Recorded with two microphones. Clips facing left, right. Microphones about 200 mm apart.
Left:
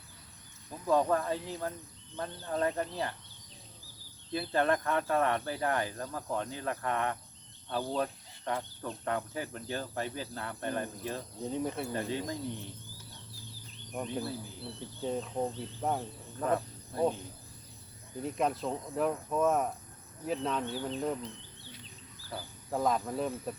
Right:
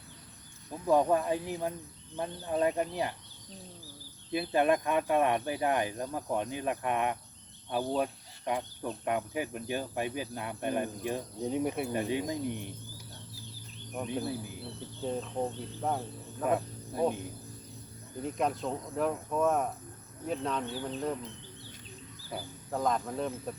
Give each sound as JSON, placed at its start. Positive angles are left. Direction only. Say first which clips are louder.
{"t": 0.7, "sound": "cricket", "louder": "right 2 dB", "side_deg": -15}
{"t": 4.3, "sound": "cricket", "louder": "right 2 dB", "side_deg": -15}
{"t": 7.7, "sound": "speech", "louder": "right 2 dB", "side_deg": -15}
{"t": 9.0, "sound": "cricket", "louder": "right 3 dB", "side_deg": -15}
{"t": 13.9, "sound": "speech", "louder": "right 1 dB", "side_deg": -5}
{"t": 14.3, "sound": "cricket", "louder": "right 3 dB", "side_deg": -15}
{"t": 15.0, "sound": "speech", "louder": "even", "side_deg": 0}
{"t": 16.4, "sound": "cricket", "louder": "right 1 dB", "side_deg": -15}
{"t": 18.2, "sound": "speech", "louder": "even", "side_deg": 0}
{"t": 22.3, "sound": "speech", "louder": "right 2 dB", "side_deg": -20}
{"t": 22.7, "sound": "speech", "louder": "left 1 dB", "side_deg": 5}